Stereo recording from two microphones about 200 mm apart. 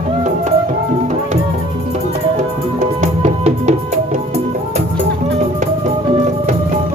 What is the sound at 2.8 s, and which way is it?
Music, 35° right (ahead or behind).